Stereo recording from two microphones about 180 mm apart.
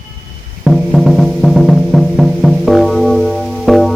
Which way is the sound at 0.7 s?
Centre (ahead or behind).